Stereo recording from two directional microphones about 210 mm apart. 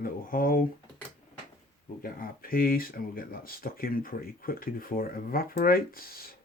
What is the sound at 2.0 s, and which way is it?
Speech, 45° left (ahead or behind).